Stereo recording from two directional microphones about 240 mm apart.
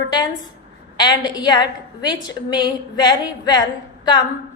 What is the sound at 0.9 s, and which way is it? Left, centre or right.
A woman's voice, centre.